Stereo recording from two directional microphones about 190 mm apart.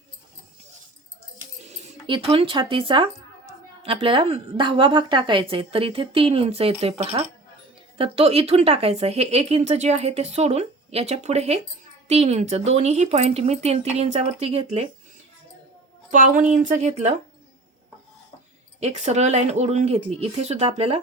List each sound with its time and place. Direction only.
1.7 s a woman's voice: 30° right (ahead or behind)
16.0 s speech: 40° right (ahead or behind)
18.8 s speech: 35° right (ahead or behind)